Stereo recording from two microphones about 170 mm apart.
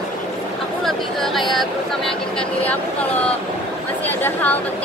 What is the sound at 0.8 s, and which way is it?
Speech, centre (ahead or behind).